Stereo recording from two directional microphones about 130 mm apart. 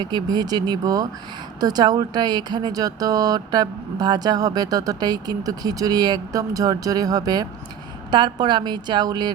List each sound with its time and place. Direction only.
0.0 s a woman's voice: 30° right (ahead or behind)